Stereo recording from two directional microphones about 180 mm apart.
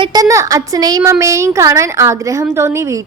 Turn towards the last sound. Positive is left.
turn(degrees=-15)  # may be behind; listen again after turning